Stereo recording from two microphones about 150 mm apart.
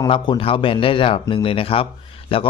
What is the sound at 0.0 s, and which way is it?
A man's voice, 35° left (ahead or behind).